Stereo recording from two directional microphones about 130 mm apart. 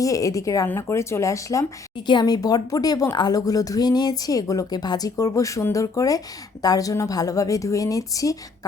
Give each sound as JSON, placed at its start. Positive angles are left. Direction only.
{"t": 0.0, "sound": "a woman's voice", "side_deg": 25}